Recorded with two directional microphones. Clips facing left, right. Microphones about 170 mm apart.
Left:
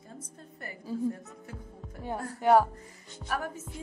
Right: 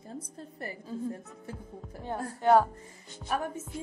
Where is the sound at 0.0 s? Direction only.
35° right (ahead or behind).